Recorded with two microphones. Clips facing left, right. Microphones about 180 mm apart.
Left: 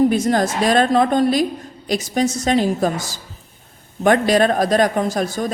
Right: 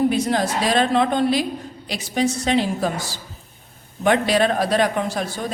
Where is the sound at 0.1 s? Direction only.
45° left (ahead or behind).